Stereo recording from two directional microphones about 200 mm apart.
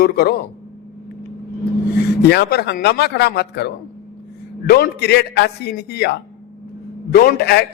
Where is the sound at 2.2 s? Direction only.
55° left (ahead or behind).